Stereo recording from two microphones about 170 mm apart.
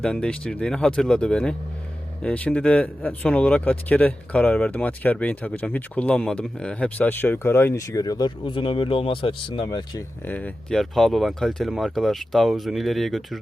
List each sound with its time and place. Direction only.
0.0 s speech: 5° left (ahead or behind); by 10.0 s 25° left (ahead or behind)
10.2 s speech: 10° left (ahead or behind)